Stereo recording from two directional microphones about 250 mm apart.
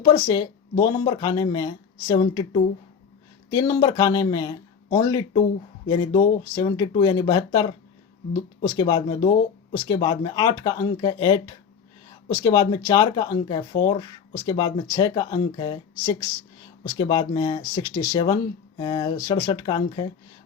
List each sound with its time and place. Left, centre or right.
0.0 s speech: centre